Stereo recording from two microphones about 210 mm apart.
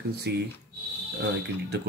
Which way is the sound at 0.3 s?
50° right (ahead or behind).